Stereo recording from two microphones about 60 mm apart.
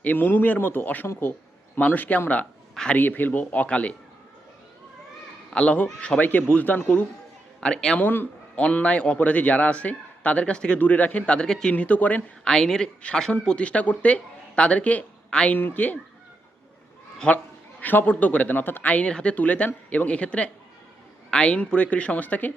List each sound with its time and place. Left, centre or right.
0.0 s speech: left
1.0 s speech: left
1.8 s a man's voice: left
5.5 s a man's voice: left
7.6 s speech: centre
7.9 s a man's voice: left; by 11.7 s centre
11.7 s a man's voice: left
12.5 s a man's voice: centre
15.5 s speech: left
17.3 s a man's voice: left